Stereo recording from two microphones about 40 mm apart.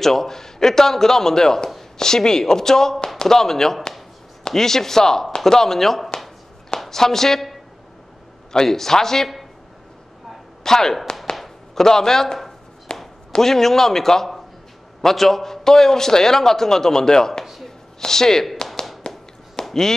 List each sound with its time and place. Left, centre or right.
0.0 s a man's voice: centre
10.6 s a man's voice: centre
11.3 s chopping: centre
12.9 s chop: left
13.4 s a man's voice: centre
17.6 s a sound: centre
19.1 s a sound: left
19.6 s chop: centre